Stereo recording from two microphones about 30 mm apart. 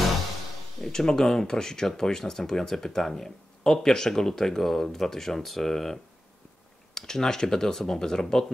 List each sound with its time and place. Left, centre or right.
0.8 s speech: centre